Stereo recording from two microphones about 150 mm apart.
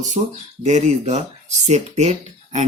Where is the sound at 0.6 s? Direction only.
50° right (ahead or behind).